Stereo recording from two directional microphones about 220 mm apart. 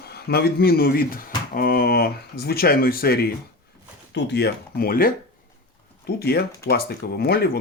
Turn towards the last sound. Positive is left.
turn(degrees=45)  # may be behind; listen again after turning